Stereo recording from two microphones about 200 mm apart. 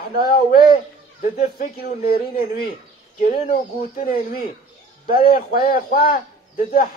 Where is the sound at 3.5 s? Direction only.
45° left (ahead or behind).